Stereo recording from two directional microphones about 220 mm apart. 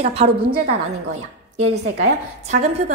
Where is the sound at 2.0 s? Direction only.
30° right (ahead or behind).